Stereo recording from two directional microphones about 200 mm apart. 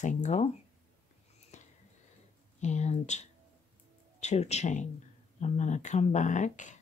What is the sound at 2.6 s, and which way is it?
Speech, 35° left (ahead or behind).